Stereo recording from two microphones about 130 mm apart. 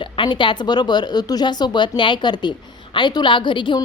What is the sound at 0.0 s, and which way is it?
Speech, 40° left (ahead or behind).